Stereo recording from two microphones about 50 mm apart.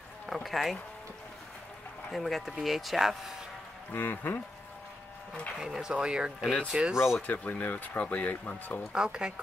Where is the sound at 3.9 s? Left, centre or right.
Left.